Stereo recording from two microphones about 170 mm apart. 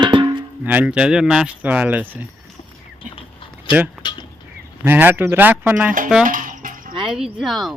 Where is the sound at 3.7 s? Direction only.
30° left (ahead or behind).